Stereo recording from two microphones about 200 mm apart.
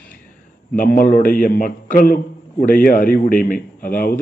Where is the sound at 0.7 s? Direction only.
45° left (ahead or behind).